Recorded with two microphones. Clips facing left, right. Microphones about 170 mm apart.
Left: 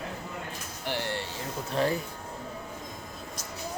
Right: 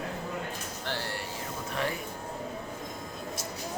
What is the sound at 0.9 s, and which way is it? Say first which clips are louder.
Vehicle: left 4 dB; 20° left (ahead or behind).